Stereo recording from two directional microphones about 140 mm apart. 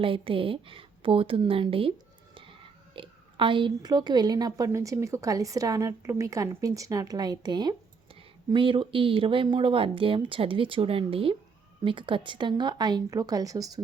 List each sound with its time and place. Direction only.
0.0 s speech: 40° right (ahead or behind)